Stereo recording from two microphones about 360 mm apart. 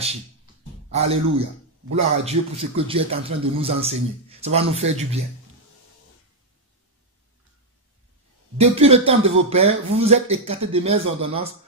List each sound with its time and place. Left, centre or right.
0.9 s a man's voice: centre
8.5 s a man's voice: centre